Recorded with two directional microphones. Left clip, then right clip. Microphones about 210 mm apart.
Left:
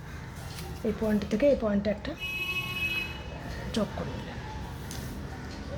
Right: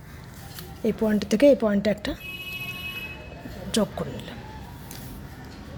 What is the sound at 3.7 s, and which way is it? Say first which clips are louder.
Speech: right 7 dB; 30° right (ahead or behind).